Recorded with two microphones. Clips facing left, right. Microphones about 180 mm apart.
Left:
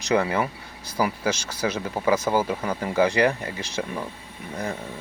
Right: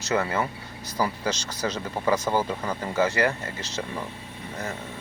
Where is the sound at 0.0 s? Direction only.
15° left (ahead or behind).